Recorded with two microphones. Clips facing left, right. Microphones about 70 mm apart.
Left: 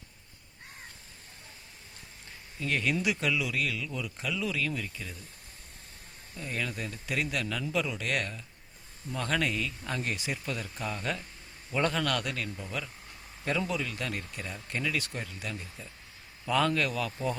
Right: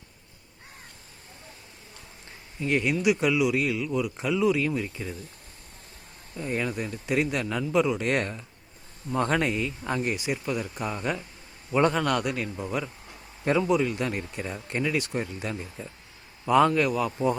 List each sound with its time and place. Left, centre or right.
2.6 s speech: centre
6.3 s speech: right